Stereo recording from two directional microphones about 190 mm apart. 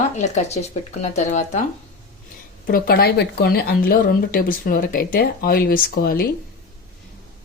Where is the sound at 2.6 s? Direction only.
50° left (ahead or behind).